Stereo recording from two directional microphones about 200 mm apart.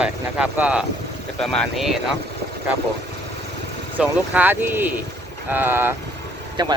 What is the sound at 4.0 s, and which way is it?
Speech, 10° right (ahead or behind).